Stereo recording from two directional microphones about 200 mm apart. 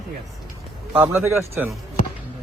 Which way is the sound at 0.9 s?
10° right (ahead or behind).